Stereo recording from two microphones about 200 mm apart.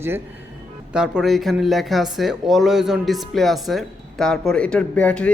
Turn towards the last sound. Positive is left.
turn(degrees=5)  # may be behind; listen again after turning